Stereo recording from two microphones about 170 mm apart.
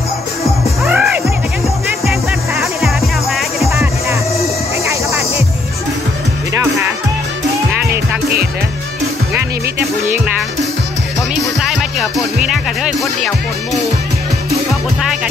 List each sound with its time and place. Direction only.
0.8 s music: 5° right (ahead or behind)
2.8 s music: centre (ahead or behind)
3.7 s music: 15° right (ahead or behind)
6.6 s music: 15° right (ahead or behind)
9.3 s music: 10° right (ahead or behind)
11.6 s music: 5° right (ahead or behind)
14.7 s music: centre (ahead or behind)